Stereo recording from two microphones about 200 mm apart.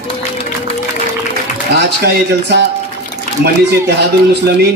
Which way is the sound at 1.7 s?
55° right (ahead or behind).